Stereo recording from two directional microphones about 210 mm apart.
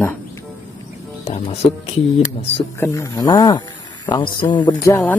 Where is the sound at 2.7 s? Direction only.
15° left (ahead or behind).